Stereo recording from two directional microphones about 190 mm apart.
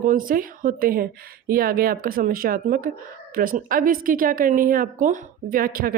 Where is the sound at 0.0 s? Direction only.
45° right (ahead or behind).